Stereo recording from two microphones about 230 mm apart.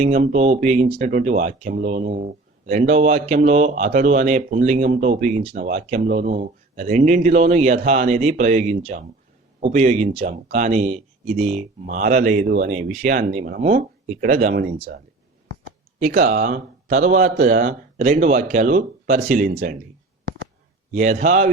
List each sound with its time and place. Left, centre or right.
0.0 s speech: right
16.0 s speech: right
20.9 s speech: right